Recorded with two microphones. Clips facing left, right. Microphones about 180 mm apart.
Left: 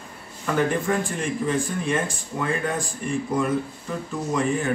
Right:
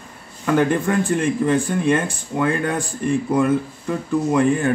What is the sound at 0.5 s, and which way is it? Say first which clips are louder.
Speech: right 4 dB; 60° right (ahead or behind).